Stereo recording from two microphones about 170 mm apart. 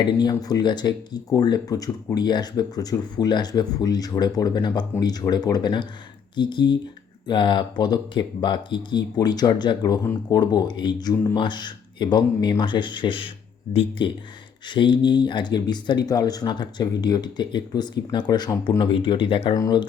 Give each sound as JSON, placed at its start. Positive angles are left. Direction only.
{"t": 0.0, "sound": "speech", "side_deg": 25}
{"t": 19.5, "sound": "speech", "side_deg": 20}